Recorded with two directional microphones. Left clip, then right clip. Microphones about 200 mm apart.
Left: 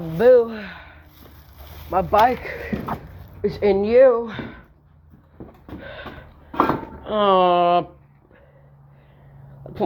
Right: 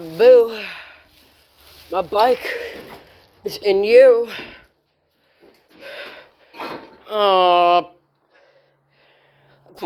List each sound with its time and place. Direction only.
0.2 s speech: 55° right (ahead or behind)
2.0 s speech: 55° right (ahead or behind)
5.8 s a sound: 50° right (ahead or behind)
7.0 s speech: 45° right (ahead or behind)